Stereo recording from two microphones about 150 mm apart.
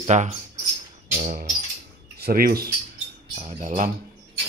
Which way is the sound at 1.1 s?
55° right (ahead or behind).